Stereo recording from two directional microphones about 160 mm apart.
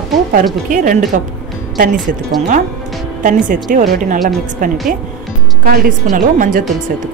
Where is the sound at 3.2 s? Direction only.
55° right (ahead or behind).